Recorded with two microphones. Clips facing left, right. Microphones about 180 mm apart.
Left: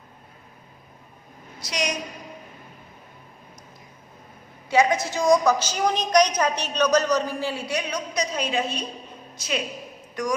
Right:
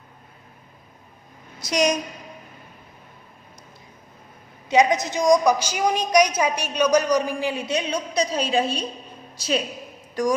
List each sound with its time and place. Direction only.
1.6 s a woman's voice: 45° right (ahead or behind)
4.7 s a woman's voice: 20° right (ahead or behind)